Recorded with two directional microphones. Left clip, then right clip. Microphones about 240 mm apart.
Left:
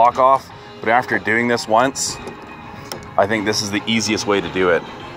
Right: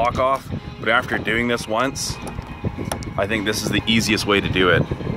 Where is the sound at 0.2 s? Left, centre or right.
Centre.